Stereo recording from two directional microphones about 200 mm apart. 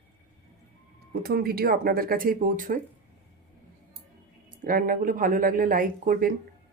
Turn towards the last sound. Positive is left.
turn(degrees=-45)  # may be behind; listen again after turning